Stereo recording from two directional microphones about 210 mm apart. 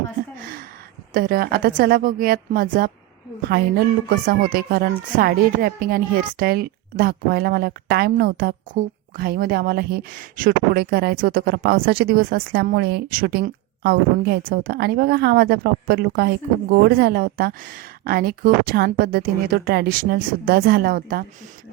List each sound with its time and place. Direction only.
1.1 s a woman's voice: 45° right (ahead or behind)